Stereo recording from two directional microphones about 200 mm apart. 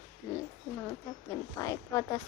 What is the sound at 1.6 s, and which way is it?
Speech, 15° left (ahead or behind).